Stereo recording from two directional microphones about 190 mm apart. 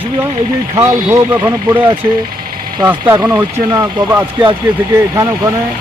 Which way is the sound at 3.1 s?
5° right (ahead or behind).